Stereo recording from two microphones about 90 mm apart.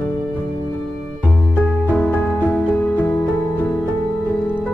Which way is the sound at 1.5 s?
20° left (ahead or behind).